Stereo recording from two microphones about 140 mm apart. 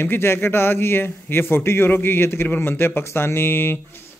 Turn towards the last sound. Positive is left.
turn(degrees=15)  # may be behind; listen again after turning